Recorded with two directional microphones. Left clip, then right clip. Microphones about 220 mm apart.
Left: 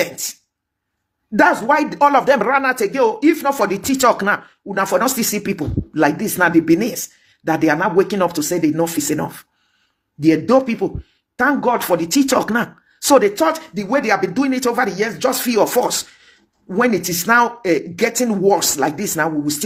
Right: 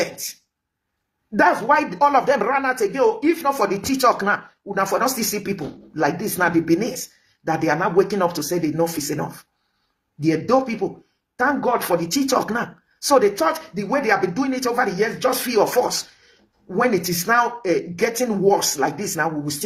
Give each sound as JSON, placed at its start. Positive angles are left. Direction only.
{"t": 0.0, "sound": "speech", "side_deg": 40}
{"t": 1.4, "sound": "speech", "side_deg": 40}